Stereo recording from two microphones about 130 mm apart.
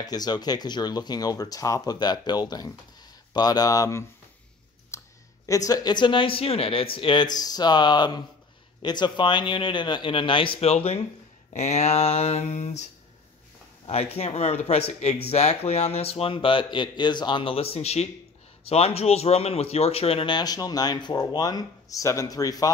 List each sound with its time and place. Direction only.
0.0 s speech: 30° left (ahead or behind)
4.9 s clicking: 20° left (ahead or behind)
5.7 s speech: 30° left (ahead or behind); by 12.8 s 60° left (ahead or behind)
13.8 s speech: 50° left (ahead or behind); by 22.7 s 30° left (ahead or behind)